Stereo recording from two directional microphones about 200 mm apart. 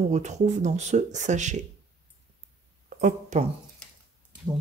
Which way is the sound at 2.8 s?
40° right (ahead or behind).